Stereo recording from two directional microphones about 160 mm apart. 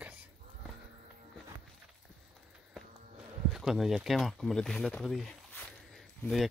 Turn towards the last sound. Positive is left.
turn(degrees=0)  # may be behind; listen again after turning